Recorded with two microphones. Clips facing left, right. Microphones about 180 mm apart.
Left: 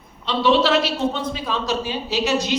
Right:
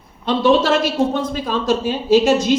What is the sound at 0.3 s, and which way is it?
A man's voice, 50° right (ahead or behind).